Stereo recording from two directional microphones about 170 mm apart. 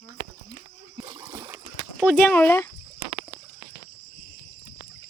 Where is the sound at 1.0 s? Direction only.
25° right (ahead or behind).